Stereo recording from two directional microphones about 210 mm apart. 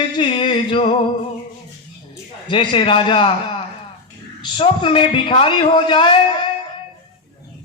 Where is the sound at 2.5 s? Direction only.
25° left (ahead or behind).